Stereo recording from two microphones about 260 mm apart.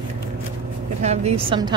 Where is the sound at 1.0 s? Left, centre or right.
Right.